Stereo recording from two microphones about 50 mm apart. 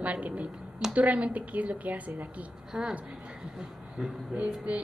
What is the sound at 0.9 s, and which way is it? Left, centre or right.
A woman's voice, right.